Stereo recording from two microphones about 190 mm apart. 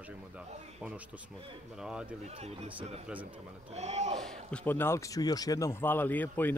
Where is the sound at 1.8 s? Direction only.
5° right (ahead or behind).